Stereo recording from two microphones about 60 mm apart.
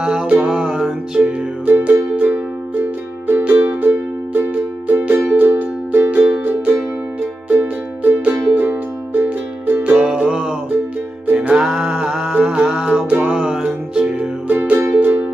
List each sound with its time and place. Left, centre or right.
0.0 s music: centre
1.2 s music: right
9.9 s music: centre
14.5 s music: right